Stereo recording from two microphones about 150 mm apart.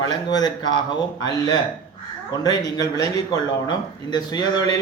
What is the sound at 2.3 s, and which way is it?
Speech, 25° left (ahead or behind).